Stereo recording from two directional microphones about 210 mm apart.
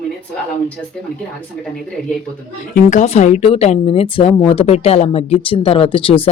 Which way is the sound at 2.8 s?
35° left (ahead or behind).